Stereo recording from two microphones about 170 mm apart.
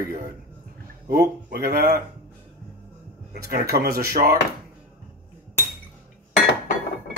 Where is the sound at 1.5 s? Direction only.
60° right (ahead or behind).